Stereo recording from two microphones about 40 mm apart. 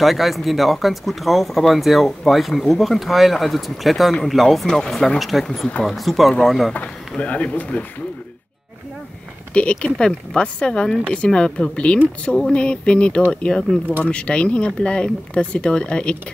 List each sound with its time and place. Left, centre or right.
0.0 s speech: centre
6.7 s speech: left
9.5 s speech: left